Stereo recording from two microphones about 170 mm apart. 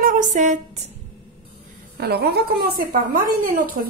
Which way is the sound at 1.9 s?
70° right (ahead or behind).